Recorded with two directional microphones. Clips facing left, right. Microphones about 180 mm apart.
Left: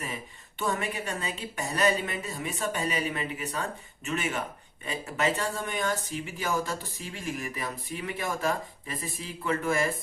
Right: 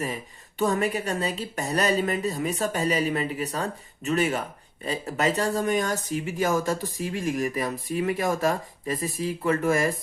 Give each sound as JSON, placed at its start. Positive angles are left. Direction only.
{"t": 0.6, "sound": "a woman's voice", "side_deg": -40}